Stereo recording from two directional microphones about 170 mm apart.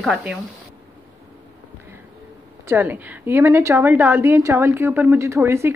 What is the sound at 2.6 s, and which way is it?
A woman's voice, 10° right (ahead or behind).